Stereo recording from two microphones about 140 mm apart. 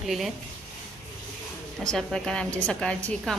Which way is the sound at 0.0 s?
Centre (ahead or behind).